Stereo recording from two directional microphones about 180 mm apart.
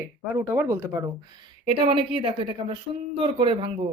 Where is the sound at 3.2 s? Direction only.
30° right (ahead or behind).